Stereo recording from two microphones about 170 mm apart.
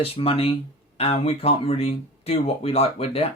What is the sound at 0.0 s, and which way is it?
Speech, 35° left (ahead or behind).